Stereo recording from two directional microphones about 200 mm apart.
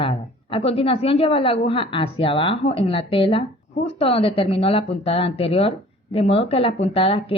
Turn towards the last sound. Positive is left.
turn(degrees=25)  # may be behind; listen again after turning